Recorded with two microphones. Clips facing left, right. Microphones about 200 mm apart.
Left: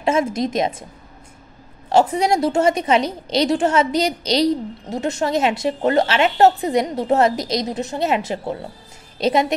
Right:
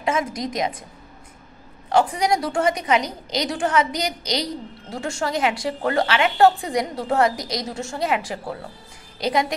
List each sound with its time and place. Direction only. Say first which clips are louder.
0.0 s a woman's voice: left 5 dB; 25° left (ahead or behind)
1.9 s a woman's voice: left 3 dB; 25° left (ahead or behind)